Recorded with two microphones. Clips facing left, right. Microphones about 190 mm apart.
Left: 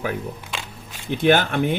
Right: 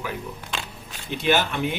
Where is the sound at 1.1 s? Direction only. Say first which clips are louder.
Left 5 dB; 55° left (ahead or behind).